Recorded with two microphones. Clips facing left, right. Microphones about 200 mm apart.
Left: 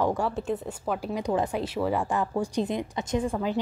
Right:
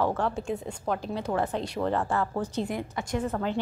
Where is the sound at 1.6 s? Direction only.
5° left (ahead or behind).